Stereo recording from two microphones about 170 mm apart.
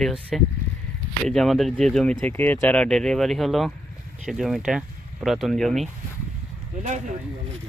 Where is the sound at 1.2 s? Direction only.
Centre (ahead or behind).